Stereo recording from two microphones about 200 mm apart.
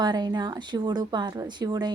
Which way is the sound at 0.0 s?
20° right (ahead or behind).